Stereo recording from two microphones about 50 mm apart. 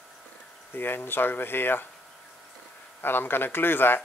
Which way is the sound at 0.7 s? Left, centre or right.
Left.